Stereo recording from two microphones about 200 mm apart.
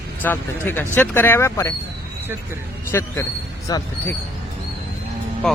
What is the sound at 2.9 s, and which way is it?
Speech, 10° left (ahead or behind).